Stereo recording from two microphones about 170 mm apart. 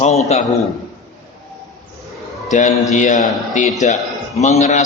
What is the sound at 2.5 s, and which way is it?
A man's voice, 45° left (ahead or behind).